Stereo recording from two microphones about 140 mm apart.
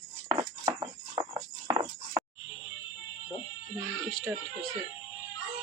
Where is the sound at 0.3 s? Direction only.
20° right (ahead or behind).